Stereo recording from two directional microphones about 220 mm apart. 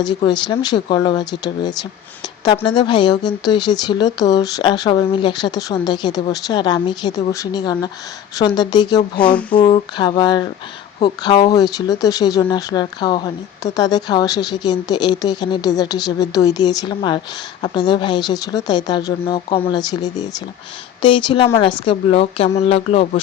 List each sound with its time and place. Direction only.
0.3 s speech: 20° left (ahead or behind)